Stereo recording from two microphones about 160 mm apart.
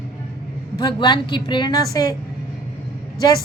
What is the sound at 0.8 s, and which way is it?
A woman's voice, 25° left (ahead or behind).